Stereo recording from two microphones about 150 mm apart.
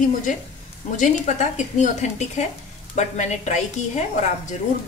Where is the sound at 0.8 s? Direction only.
55° left (ahead or behind).